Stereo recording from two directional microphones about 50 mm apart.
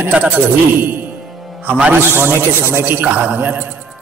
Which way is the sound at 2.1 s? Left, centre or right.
Right.